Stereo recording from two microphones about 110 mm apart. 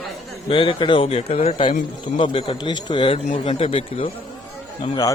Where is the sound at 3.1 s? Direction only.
80° left; by 4.1 s 55° left (ahead or behind).